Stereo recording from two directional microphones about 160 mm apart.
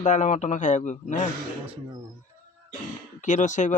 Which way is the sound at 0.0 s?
50° left (ahead or behind).